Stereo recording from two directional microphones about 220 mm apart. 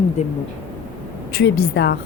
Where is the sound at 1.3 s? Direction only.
50° left (ahead or behind).